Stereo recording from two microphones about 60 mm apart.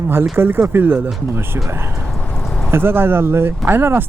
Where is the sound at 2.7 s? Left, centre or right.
Right.